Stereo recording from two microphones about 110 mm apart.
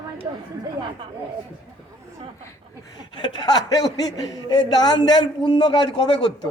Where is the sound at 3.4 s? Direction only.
35° left (ahead or behind); by 6.3 s 50° left (ahead or behind).